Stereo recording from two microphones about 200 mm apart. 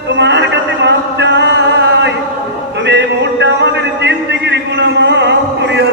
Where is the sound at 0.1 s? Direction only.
60° right (ahead or behind).